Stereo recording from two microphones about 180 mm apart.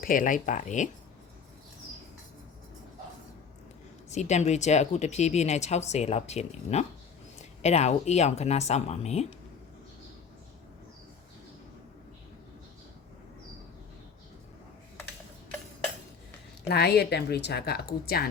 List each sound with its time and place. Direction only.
0.0 s speech: 50° left (ahead or behind)
4.1 s speech: 40° left (ahead or behind)
16.6 s speech: 65° left (ahead or behind)